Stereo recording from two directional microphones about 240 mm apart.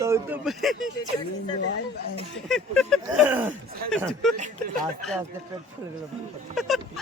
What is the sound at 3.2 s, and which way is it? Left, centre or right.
Speech, centre.